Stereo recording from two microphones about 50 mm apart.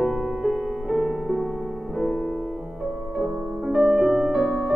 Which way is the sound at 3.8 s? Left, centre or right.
Centre.